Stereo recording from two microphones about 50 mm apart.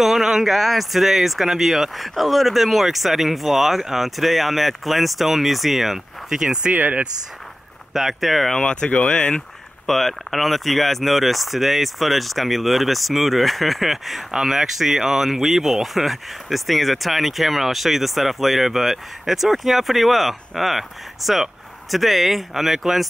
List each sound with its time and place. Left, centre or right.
0.0 s speech: centre
6.7 s speech: right
7.9 s speech: centre
8.5 s speech: centre
9.8 s speech: centre